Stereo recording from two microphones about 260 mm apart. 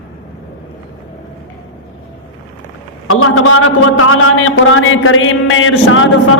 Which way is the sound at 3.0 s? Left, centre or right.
Left.